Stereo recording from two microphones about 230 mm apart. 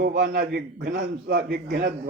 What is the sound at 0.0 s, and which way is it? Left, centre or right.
Speech, right.